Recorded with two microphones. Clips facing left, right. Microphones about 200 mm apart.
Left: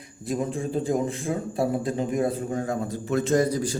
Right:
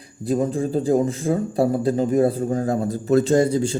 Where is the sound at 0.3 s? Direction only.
35° right (ahead or behind).